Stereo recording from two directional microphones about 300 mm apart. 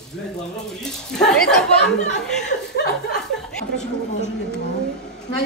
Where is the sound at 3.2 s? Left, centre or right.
Centre.